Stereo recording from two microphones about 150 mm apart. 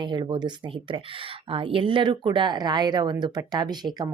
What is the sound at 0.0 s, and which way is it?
Speech, 30° right (ahead or behind).